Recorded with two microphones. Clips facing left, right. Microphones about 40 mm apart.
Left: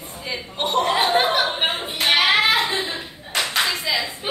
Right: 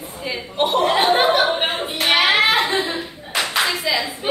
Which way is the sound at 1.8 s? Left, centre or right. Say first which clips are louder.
Right 1 dB; centre.